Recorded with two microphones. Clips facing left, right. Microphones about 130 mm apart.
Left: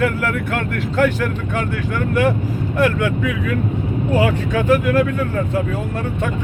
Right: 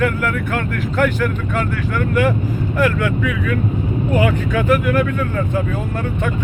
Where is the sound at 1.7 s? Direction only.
30° left (ahead or behind).